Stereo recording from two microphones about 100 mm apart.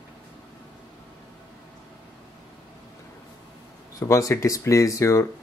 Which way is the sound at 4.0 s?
35° left (ahead or behind).